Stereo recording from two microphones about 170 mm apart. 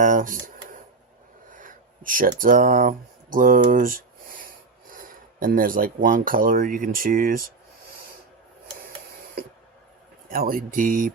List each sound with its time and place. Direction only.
0.0 s a sound: 50° right (ahead or behind)
1.5 s speech: 50° right (ahead or behind)
10.2 s speech: 55° right (ahead or behind)